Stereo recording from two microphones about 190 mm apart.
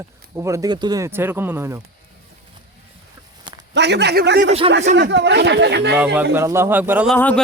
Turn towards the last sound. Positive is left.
turn(degrees=5)  # may be behind; listen again after turning